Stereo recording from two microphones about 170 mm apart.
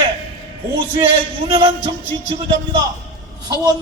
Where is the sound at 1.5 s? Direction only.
30° right (ahead or behind).